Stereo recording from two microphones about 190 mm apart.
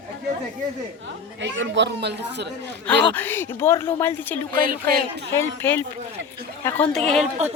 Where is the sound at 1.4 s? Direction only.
70° right (ahead or behind).